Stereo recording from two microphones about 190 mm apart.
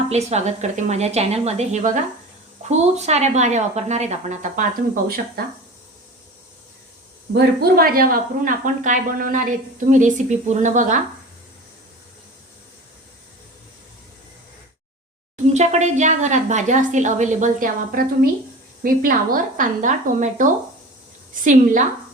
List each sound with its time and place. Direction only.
0.1 s a woman's voice: 35° right (ahead or behind)
7.3 s a woman's voice: 55° right (ahead or behind)
15.5 s a woman's voice: 35° right (ahead or behind)